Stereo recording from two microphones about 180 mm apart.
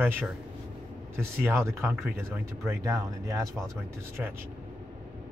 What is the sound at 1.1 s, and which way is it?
Speech, 15° right (ahead or behind).